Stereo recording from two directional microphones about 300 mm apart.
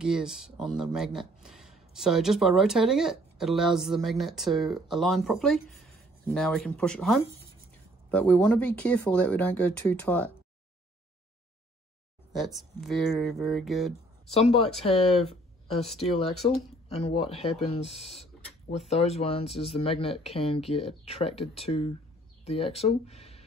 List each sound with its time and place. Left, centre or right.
0.0 s speech: centre
12.4 s speech: centre
14.3 s speech: centre
15.1 s speech: centre
16.2 s speech: centre